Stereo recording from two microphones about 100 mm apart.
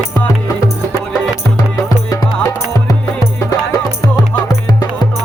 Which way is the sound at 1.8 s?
35° left (ahead or behind).